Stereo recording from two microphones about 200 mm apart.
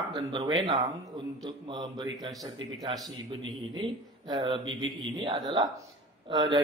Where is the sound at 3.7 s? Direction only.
20° right (ahead or behind).